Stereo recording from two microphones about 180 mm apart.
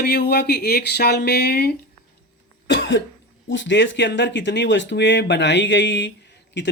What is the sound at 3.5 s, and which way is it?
Speech, 90° left.